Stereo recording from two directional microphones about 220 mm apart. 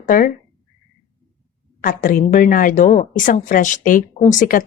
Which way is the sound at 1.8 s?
40° left (ahead or behind).